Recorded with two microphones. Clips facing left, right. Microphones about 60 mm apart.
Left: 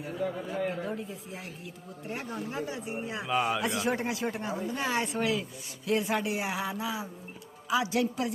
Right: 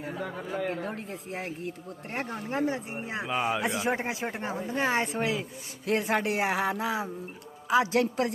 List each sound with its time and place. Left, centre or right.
0.9 s speech: right
3.2 s speech: centre
5.8 s speech: right